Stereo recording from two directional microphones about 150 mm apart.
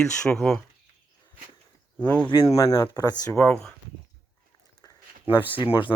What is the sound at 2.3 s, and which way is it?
Speech, 25° left (ahead or behind).